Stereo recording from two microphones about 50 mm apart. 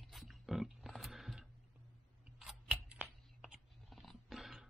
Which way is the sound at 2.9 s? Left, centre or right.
Right.